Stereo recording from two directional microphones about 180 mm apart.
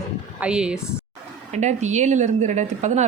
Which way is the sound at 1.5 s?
40° right (ahead or behind).